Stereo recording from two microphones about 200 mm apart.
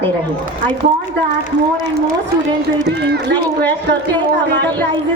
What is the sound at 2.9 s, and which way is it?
Speech, 55° right (ahead or behind).